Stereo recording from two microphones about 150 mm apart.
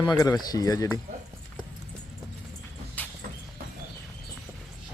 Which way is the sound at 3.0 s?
10° left (ahead or behind).